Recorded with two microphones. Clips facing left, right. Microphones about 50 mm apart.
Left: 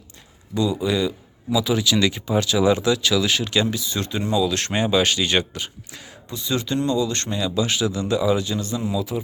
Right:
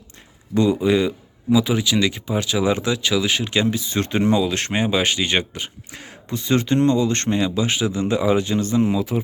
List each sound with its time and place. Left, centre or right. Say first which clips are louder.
0.5 s speech: right 4 dB; right
0.9 s speech: right 4 dB; right
4.4 s speech: even; right
4.7 s speech: left 1 dB; centre; by 9.2 s right